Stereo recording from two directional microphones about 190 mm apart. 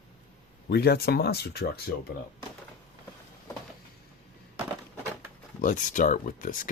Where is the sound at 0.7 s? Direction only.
55° left (ahead or behind).